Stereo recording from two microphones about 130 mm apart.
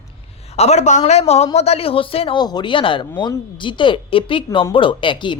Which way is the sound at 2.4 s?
35° left (ahead or behind).